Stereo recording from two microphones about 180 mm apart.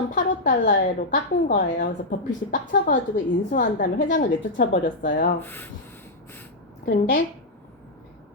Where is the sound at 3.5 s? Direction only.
50° left (ahead or behind).